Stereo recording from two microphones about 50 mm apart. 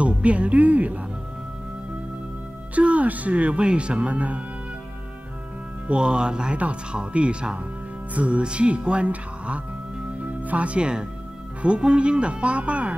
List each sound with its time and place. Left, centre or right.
0.0 s speech: right
2.7 s speech: right
5.9 s speech: centre